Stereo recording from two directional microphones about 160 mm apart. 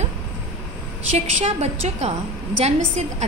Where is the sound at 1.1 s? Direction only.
40° right (ahead or behind).